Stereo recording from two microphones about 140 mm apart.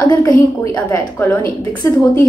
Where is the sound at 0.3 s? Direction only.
10° left (ahead or behind).